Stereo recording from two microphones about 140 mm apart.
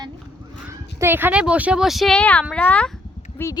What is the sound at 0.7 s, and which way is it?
Speech, 20° right (ahead or behind).